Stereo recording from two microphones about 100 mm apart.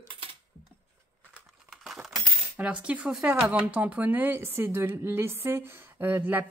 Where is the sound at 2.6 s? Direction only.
15° right (ahead or behind).